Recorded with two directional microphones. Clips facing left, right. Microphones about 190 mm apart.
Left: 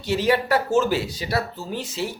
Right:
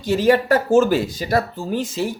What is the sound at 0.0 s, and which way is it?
Speech, 45° right (ahead or behind).